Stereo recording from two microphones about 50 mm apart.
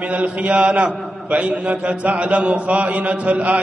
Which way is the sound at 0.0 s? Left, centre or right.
Right.